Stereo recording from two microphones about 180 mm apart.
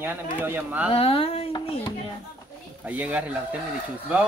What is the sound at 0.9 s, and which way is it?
Speech, 30° left (ahead or behind).